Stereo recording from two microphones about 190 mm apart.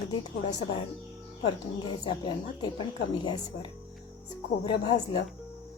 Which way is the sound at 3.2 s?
25° left (ahead or behind).